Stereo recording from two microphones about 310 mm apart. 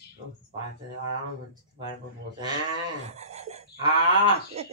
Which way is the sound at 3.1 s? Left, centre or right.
Right.